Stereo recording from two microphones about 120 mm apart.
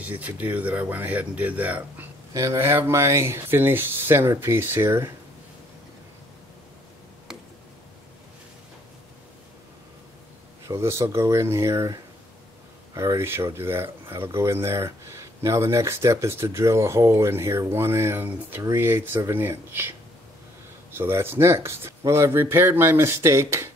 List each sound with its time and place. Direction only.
0.0 s speech: 15° right (ahead or behind)
2.3 s speech: 25° right (ahead or behind)
10.6 s speech: 25° right (ahead or behind)
20.9 s speech: 20° right (ahead or behind)